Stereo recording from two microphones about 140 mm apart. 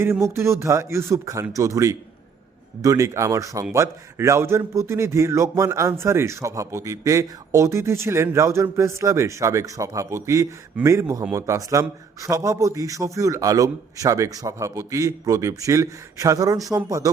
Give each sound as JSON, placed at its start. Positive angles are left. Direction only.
{"t": 0.0, "sound": "a man's voice", "side_deg": -15}